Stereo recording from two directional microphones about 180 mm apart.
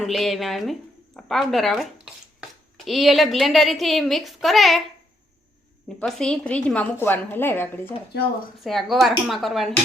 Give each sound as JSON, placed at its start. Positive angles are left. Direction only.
{"t": 0.0, "sound": "a woman's voice", "side_deg": 0}
{"t": 6.0, "sound": "a woman's voice", "side_deg": 5}
{"t": 8.6, "sound": "a woman's voice", "side_deg": 0}